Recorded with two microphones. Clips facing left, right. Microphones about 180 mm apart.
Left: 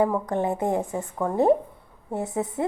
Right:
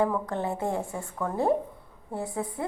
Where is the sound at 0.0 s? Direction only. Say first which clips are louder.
Left 4 dB; 20° left (ahead or behind).